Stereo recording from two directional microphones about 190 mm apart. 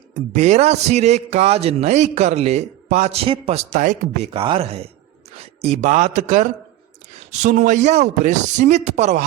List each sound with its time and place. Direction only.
0.3 s a man's voice: 35° right (ahead or behind)